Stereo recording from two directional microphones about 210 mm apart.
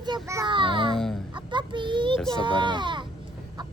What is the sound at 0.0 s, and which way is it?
Child singing, 15° right (ahead or behind).